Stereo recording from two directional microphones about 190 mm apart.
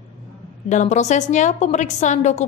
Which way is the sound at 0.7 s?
40° left (ahead or behind).